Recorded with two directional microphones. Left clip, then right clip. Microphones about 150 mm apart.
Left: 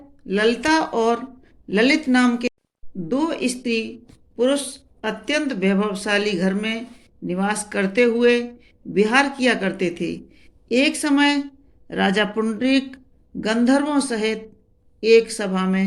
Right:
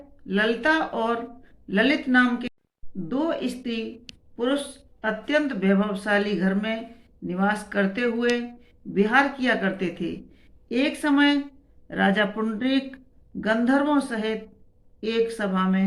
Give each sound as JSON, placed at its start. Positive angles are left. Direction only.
{"t": 0.2, "sound": "speech", "side_deg": 35}